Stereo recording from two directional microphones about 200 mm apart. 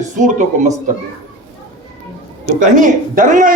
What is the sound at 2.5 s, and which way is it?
A man's voice, 40° right (ahead or behind).